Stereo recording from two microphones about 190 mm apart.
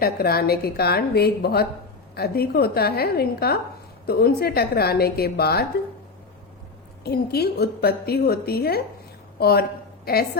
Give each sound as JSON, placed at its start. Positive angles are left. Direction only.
{"t": 0.0, "sound": "a woman's voice", "side_deg": 55}
{"t": 7.0, "sound": "a woman's voice", "side_deg": 55}